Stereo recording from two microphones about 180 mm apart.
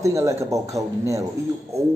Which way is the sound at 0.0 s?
15° right (ahead or behind).